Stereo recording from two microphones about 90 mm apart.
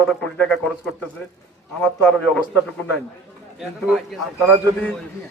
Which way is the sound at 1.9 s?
15° left (ahead or behind).